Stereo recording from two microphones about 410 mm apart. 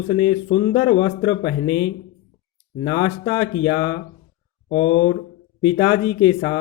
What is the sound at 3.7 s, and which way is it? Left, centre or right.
Speech, left.